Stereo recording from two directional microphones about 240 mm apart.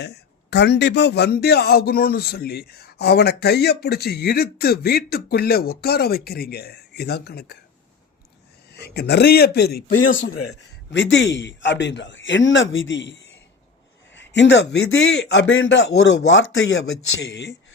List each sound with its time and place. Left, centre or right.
0.0 s a man's voice: left
8.7 s a man's voice: left